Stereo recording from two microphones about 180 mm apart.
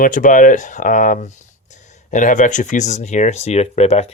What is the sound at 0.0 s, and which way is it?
Speech, 50° left (ahead or behind).